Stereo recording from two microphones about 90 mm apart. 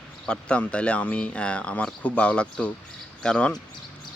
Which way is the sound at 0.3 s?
10° left (ahead or behind).